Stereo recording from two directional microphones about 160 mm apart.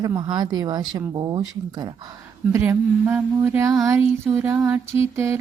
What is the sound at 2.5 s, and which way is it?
Mantra, 15° right (ahead or behind).